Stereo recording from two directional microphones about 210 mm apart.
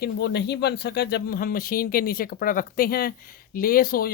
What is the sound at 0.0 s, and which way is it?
Speech, 50° left (ahead or behind).